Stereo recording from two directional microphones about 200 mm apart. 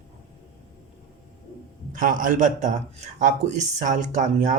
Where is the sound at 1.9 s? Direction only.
40° right (ahead or behind).